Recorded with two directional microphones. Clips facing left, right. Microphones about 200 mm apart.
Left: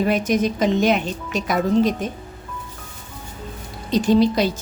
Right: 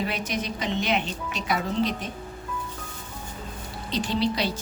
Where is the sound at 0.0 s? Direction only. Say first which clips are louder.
Left 10 dB; 45° left (ahead or behind).